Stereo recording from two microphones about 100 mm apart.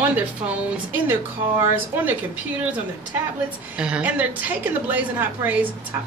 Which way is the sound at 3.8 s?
15° right (ahead or behind).